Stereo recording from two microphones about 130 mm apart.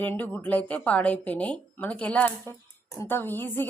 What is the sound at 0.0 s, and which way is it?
A woman's voice, 15° left (ahead or behind).